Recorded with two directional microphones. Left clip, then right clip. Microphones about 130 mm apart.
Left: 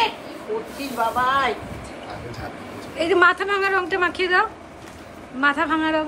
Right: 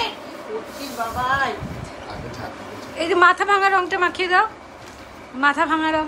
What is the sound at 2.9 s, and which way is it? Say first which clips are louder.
A woman's voice: right 1 dB; 15° right (ahead or behind).